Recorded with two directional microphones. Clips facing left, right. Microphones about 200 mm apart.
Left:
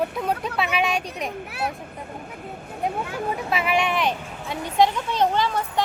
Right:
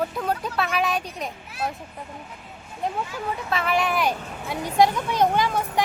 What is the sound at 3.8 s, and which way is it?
Speech, 5° right (ahead or behind).